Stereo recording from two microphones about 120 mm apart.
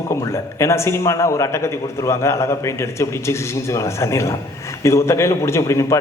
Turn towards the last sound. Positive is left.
turn(degrees=25)  # may be behind; listen again after turning